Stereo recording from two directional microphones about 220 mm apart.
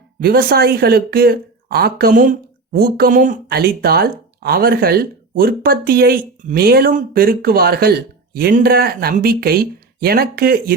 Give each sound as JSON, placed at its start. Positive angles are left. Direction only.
{"t": 0.2, "sound": "speech", "side_deg": -45}